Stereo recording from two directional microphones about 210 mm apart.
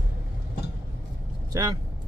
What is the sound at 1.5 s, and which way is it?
Speech, 20° right (ahead or behind).